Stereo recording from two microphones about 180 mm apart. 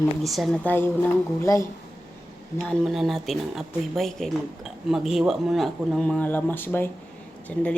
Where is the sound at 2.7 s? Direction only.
Centre (ahead or behind).